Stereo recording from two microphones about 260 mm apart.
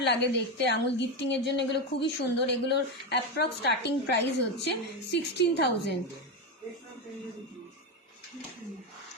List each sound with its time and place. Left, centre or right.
0.0 s a woman's voice: left